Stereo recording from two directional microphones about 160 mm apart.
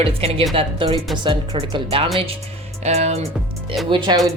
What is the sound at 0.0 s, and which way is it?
A woman's voice, 35° right (ahead or behind).